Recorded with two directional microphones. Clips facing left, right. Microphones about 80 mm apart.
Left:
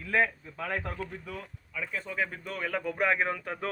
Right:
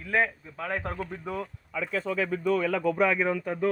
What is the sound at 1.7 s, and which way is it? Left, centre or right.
Speech, right.